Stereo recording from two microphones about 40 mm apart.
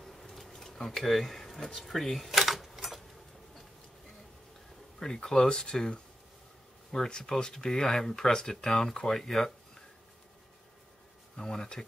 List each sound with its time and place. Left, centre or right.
0.0 s bee: centre
1.8 s speech: centre
2.7 s tick-tock: centre
5.0 s speech: centre
11.3 s speech: centre